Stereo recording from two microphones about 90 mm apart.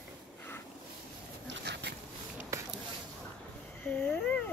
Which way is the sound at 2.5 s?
35° right (ahead or behind).